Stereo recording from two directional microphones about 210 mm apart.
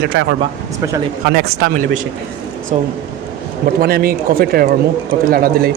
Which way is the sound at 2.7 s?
35° right (ahead or behind).